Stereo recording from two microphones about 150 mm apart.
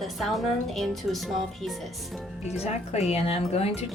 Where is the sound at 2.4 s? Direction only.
45° left (ahead or behind).